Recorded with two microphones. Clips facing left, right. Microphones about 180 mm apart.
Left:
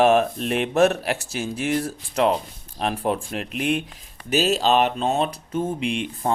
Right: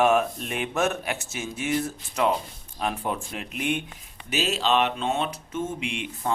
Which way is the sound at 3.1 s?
65° left (ahead or behind).